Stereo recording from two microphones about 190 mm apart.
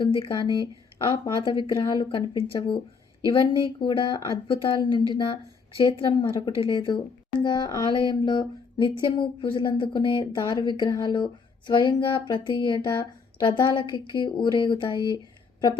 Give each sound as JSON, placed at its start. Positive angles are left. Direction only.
{"t": 0.0, "sound": "speech", "side_deg": 25}